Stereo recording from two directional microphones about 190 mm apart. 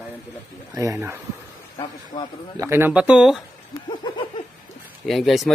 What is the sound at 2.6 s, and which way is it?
Speech, 15° right (ahead or behind).